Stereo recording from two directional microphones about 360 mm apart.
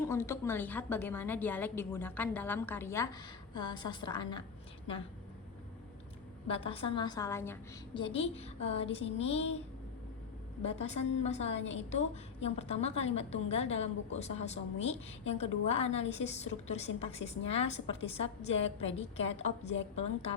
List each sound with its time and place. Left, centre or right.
0.0 s a woman's voice: centre
6.5 s a woman's voice: centre
10.6 s a woman's voice: centre